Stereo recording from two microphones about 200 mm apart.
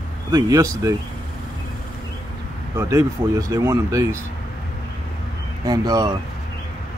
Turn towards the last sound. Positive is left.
turn(degrees=-20)  # may be behind; listen again after turning